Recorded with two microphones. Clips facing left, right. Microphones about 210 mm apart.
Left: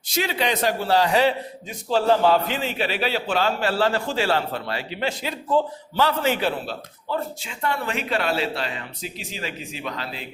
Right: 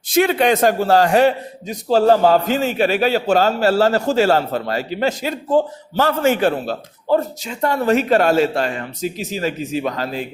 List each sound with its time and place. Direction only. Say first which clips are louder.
0.1 s a man's voice: right 9 dB; 55° right (ahead or behind)